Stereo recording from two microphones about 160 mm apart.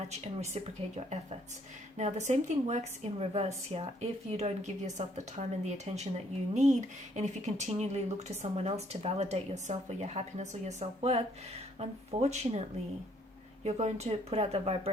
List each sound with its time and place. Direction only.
0.1 s a woman's voice: 40° right (ahead or behind)
13.7 s speech: 40° right (ahead or behind)